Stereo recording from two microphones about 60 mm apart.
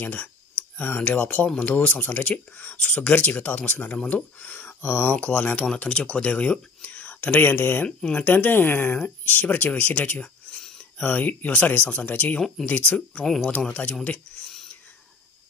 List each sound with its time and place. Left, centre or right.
0.0 s speech: left
12.4 s speech: centre
12.6 s speech: left
13.1 s speech: centre
13.5 s speech: centre